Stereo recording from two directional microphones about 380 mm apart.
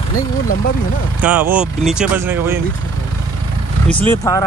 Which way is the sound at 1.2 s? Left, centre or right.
Centre.